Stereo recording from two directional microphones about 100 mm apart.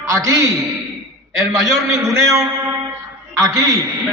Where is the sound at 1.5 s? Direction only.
35° right (ahead or behind).